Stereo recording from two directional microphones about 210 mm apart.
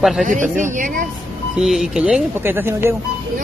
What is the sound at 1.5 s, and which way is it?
Speech, centre (ahead or behind).